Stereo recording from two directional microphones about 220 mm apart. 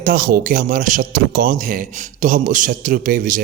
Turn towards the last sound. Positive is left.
turn(degrees=-40)  # may be behind; listen again after turning